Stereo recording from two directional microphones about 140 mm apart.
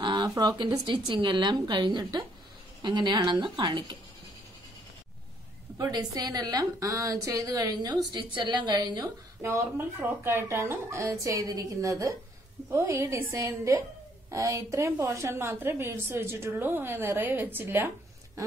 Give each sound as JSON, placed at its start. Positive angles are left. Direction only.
{"t": 0.0, "sound": "speech", "side_deg": -30}
{"t": 5.8, "sound": "a woman's voice", "side_deg": -30}
{"t": 9.4, "sound": "a woman's voice", "side_deg": -15}